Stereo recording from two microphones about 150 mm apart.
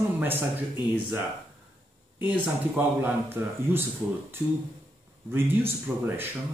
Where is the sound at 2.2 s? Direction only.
10° right (ahead or behind).